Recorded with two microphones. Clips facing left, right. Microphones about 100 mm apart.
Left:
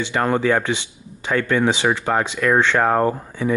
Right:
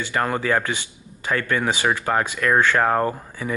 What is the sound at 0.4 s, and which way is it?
Speech, 15° left (ahead or behind).